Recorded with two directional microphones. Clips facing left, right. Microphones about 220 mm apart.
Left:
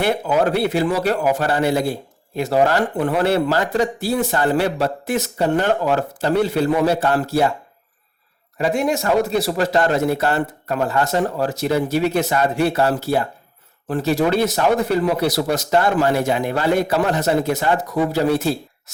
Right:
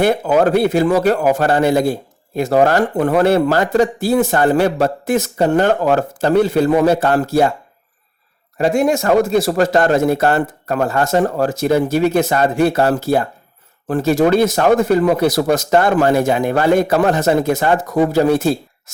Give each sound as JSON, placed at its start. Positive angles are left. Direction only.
{"t": 0.0, "sound": "speech", "side_deg": -50}
{"t": 8.5, "sound": "speech", "side_deg": -45}